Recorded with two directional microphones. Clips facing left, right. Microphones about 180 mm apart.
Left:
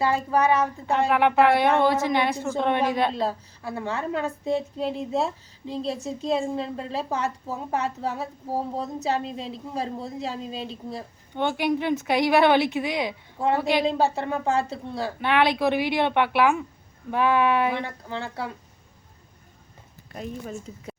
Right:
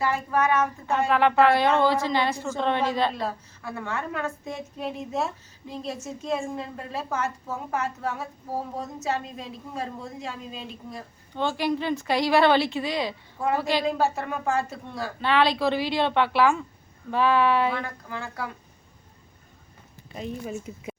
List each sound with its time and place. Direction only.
0.0 s a woman's voice: 30° left (ahead or behind)
1.1 s a woman's voice: 15° left (ahead or behind)
3.1 s a woman's voice: 30° left (ahead or behind)
11.3 s a woman's voice: 20° left (ahead or behind)
15.2 s a woman's voice: 15° left (ahead or behind)
20.1 s speech: 5° right (ahead or behind)